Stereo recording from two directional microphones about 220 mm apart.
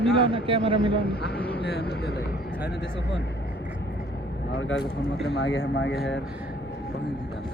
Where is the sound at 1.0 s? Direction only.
45° left (ahead or behind).